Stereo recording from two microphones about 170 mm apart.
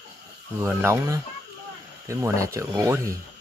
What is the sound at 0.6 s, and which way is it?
Speech, 15° right (ahead or behind).